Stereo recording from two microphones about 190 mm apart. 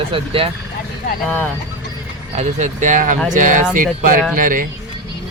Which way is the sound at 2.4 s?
40° right (ahead or behind).